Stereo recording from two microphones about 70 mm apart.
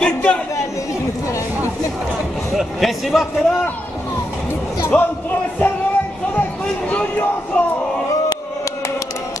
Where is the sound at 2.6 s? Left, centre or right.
Centre.